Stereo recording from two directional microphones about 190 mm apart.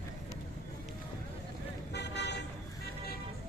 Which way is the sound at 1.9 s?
65° left (ahead or behind).